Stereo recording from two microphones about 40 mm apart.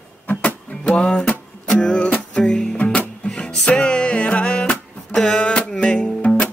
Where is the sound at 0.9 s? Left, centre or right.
Left.